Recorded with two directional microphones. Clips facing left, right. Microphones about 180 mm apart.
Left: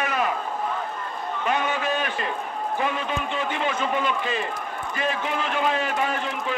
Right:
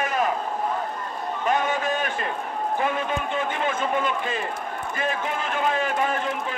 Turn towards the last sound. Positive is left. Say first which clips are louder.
# right 1 dB
turn(degrees=-45)  # may be behind; listen again after turning